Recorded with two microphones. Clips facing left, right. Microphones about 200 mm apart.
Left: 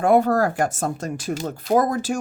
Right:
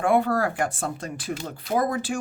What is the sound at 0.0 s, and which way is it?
Speech, 40° left (ahead or behind).